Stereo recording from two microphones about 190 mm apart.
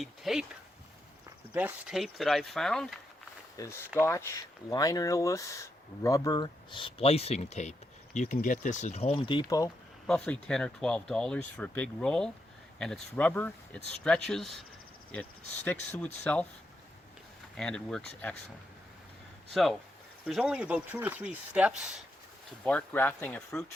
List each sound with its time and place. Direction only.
0.0 s speech: centre (ahead or behind)
1.5 s speech: 5° right (ahead or behind)
3.6 s speech: 15° left (ahead or behind)
10.1 s speech: 5° left (ahead or behind)
17.6 s speech: 5° left (ahead or behind)
20.2 s speech: 5° right (ahead or behind)
22.6 s speech: 10° left (ahead or behind)